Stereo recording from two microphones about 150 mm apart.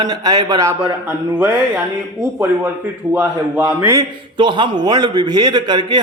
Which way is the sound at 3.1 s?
10° right (ahead or behind).